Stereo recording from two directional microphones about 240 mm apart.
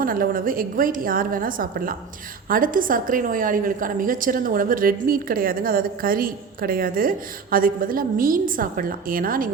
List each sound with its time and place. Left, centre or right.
0.0 s a woman's voice: right